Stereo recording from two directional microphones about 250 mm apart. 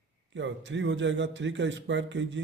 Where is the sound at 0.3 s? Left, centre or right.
Right.